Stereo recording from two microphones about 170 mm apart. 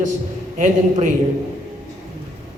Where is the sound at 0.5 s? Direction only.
50° right (ahead or behind).